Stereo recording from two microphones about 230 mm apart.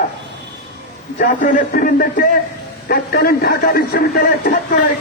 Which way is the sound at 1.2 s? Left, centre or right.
Left.